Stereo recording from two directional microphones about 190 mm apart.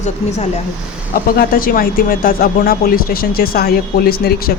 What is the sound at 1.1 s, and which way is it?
Speech, 50° left (ahead or behind).